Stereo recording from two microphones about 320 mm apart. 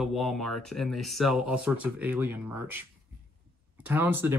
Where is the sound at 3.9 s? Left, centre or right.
Centre.